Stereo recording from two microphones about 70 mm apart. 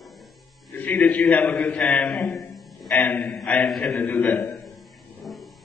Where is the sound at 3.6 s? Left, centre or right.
Centre.